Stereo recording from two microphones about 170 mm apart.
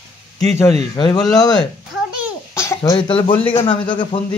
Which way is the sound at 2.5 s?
15° left (ahead or behind).